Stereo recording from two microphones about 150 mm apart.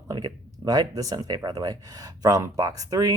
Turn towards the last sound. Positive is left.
turn(degrees=-25)  # may be behind; listen again after turning